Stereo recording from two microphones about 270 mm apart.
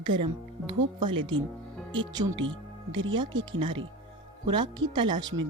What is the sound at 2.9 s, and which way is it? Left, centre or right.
Speech, right.